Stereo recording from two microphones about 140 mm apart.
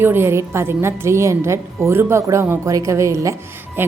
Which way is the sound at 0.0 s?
15° right (ahead or behind).